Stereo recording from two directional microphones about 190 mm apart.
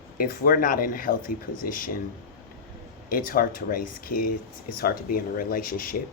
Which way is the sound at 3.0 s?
50° left (ahead or behind).